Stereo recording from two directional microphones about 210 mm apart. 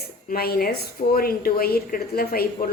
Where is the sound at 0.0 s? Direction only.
45° left (ahead or behind).